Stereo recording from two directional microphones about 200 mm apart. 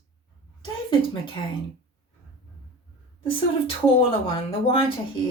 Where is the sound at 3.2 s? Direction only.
25° left (ahead or behind).